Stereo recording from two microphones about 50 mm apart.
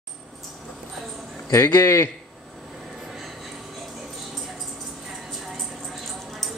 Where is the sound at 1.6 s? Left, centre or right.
Left.